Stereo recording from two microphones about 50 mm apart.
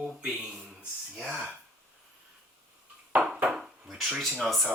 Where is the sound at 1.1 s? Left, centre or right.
Centre.